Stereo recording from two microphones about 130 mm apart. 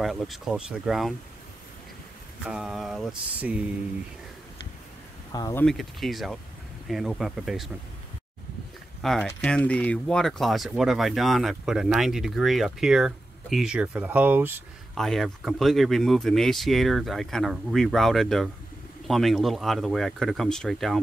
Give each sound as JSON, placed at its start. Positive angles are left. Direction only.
{"t": 0.0, "sound": "speech", "side_deg": 0}
{"t": 2.4, "sound": "speech", "side_deg": -5}
{"t": 3.3, "sound": "mantra", "side_deg": -10}
{"t": 5.3, "sound": "speech", "side_deg": 30}
{"t": 5.7, "sound": "speech", "side_deg": 0}
{"t": 9.0, "sound": "speech", "side_deg": 0}
{"t": 15.0, "sound": "speech", "side_deg": 0}